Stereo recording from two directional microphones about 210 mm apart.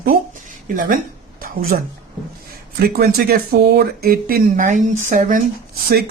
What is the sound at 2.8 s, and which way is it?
Speech, 45° right (ahead or behind).